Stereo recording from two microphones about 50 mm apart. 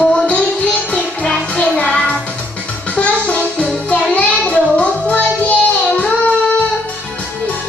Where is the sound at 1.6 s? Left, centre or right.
Left.